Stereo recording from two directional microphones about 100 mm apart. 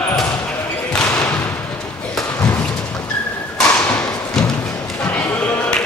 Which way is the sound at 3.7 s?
20° left (ahead or behind).